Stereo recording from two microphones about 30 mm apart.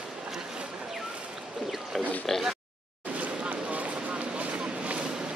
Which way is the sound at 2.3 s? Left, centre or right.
Centre.